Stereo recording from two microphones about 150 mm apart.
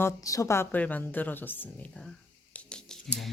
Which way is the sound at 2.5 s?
5° left (ahead or behind).